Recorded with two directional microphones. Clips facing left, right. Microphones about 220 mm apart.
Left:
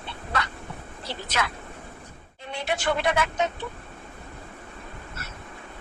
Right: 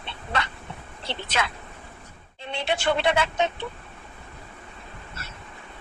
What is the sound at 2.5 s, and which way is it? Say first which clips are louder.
Speech: right 2 dB; 25° right (ahead or behind).